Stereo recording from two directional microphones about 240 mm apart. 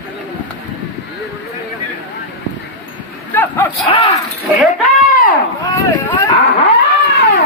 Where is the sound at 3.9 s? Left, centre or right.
Left.